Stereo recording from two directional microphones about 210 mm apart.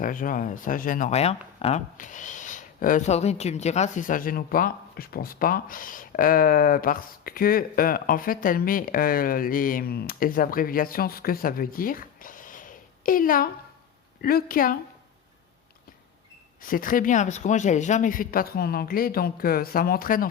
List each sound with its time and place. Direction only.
0.0 s a woman's voice: 40° left (ahead or behind)
16.6 s speech: 40° left (ahead or behind)